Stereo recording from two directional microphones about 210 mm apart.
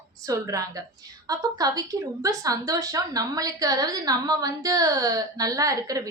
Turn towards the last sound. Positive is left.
turn(degrees=-15)  # may be behind; listen again after turning